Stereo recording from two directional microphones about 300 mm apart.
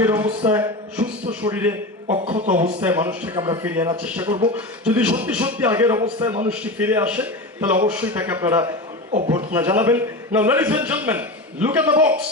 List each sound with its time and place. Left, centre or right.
0.0 s a man's voice: centre
2.0 s speech: right
2.8 s a man's voice: centre
6.5 s a man's voice: centre